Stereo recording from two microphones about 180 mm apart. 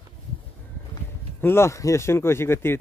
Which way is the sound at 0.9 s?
15° left (ahead or behind).